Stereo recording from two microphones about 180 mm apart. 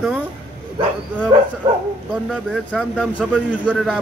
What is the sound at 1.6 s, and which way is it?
Speech, 25° right (ahead or behind).